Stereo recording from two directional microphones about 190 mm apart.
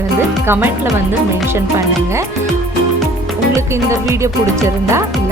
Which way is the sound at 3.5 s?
15° right (ahead or behind).